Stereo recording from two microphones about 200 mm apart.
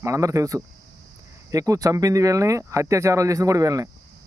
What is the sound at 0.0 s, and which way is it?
Speech, 15° right (ahead or behind).